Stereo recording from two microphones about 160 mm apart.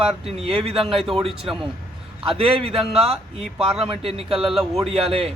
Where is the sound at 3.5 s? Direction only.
5° right (ahead or behind).